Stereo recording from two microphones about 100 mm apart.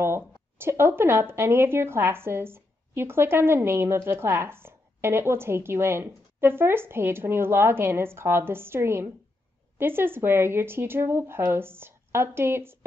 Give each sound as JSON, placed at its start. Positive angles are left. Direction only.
{"t": 0.0, "sound": "speech", "side_deg": -25}